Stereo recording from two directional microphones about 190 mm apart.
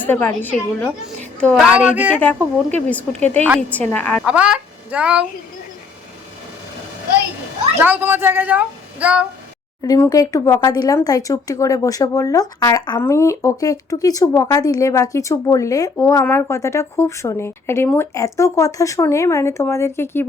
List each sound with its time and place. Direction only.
0.0 s a woman's voice: 10° left (ahead or behind)
1.7 s a child's voice: 5° right (ahead or behind)
2.7 s speech: 5° left (ahead or behind)
4.3 s speech: 5° right (ahead or behind)
7.8 s a child's voice: 10° right (ahead or behind)
9.8 s speech: 20° left (ahead or behind)